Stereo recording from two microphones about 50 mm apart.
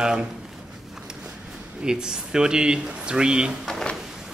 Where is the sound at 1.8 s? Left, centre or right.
Centre.